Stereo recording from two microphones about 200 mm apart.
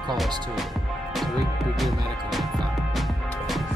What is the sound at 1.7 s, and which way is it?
Music, centre (ahead or behind).